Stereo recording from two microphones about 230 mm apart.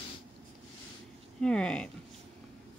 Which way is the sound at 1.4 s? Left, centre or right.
Centre.